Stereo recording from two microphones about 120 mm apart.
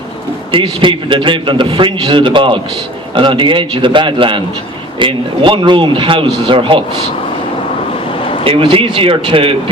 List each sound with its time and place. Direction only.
0.5 s a man's voice: 45° right (ahead or behind)
8.4 s a man's voice: 45° right (ahead or behind)